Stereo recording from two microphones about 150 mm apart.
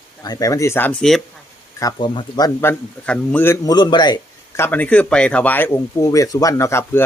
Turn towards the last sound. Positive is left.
turn(degrees=15)  # may be behind; listen again after turning